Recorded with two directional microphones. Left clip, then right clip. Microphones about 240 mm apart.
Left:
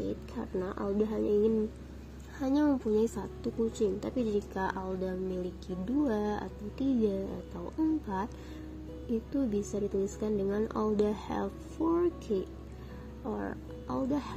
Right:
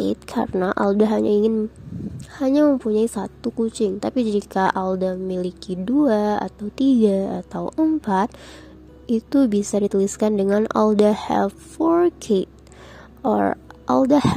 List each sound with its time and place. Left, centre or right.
0.3 s a woman's voice: right
9.3 s a woman's voice: right